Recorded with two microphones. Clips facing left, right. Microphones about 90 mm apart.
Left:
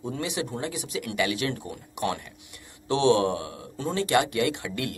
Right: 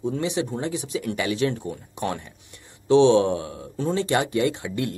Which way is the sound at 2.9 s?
25° right (ahead or behind).